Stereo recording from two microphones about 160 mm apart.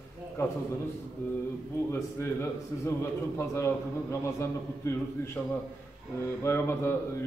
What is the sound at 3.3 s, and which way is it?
A man's voice, 15° left (ahead or behind).